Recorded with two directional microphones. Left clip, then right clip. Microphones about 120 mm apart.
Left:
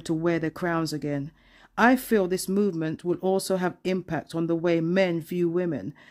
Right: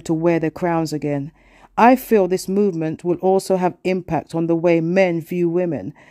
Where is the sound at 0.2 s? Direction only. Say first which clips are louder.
Right 9 dB; 40° right (ahead or behind).